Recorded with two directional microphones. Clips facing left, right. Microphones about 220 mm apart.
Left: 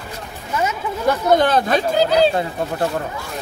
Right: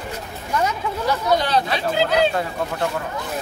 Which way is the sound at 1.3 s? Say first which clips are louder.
Left 5 dB; 50° left (ahead or behind).